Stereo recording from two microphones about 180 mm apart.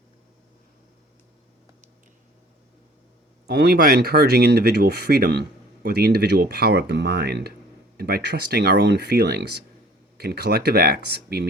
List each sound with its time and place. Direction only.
3.4 s speech: 60° right (ahead or behind)